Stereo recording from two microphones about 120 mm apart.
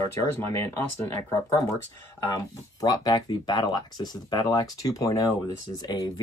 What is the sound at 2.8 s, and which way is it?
Speech, 30° left (ahead or behind).